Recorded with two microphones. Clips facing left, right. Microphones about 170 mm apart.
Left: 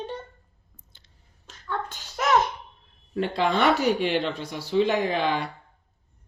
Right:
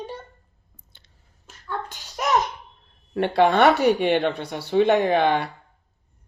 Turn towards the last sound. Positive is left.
turn(degrees=-60)  # may be behind; listen again after turning